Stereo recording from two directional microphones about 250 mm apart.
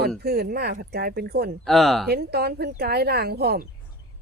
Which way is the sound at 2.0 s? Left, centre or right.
Right.